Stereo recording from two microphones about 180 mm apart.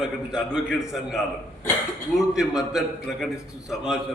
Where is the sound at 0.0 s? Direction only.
5° right (ahead or behind).